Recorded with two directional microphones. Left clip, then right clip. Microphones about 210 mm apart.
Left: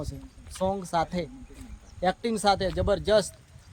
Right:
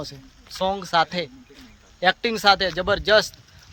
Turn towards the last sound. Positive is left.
turn(degrees=0)  # may be behind; listen again after turning